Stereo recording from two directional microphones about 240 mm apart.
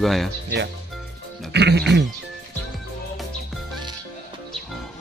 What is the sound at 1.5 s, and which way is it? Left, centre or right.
Speech, right.